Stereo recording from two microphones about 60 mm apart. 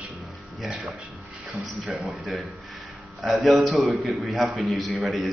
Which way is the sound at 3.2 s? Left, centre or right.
Centre.